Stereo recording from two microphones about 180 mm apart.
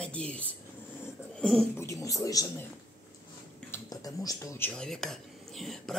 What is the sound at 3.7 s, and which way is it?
Speech, 20° left (ahead or behind).